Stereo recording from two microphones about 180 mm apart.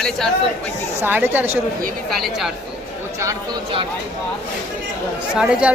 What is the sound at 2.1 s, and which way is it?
Speech, centre (ahead or behind).